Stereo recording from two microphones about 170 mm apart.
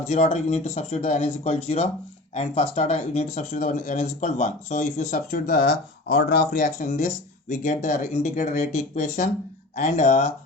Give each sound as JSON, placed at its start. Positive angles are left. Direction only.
{"t": 0.1, "sound": "speech", "side_deg": 40}